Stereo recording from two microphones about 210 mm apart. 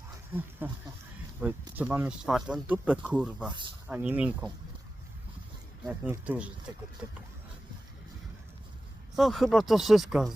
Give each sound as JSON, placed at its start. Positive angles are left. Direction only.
{"t": 0.6, "sound": "speech", "side_deg": -10}
{"t": 3.4, "sound": "speech", "side_deg": -20}
{"t": 3.8, "sound": "speech", "side_deg": -10}
{"t": 5.8, "sound": "speech", "side_deg": -5}
{"t": 9.1, "sound": "speech", "side_deg": 0}